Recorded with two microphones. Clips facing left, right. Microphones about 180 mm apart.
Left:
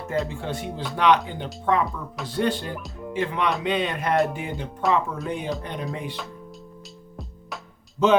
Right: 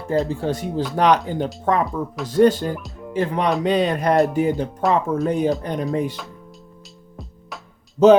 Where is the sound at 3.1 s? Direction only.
40° right (ahead or behind).